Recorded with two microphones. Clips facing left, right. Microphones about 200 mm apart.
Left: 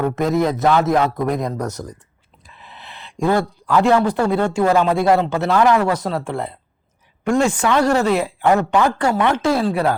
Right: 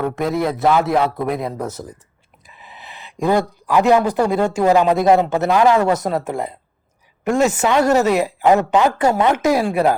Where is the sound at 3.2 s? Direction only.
15° right (ahead or behind).